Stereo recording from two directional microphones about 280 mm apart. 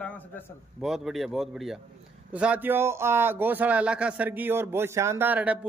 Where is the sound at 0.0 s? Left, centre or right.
Centre.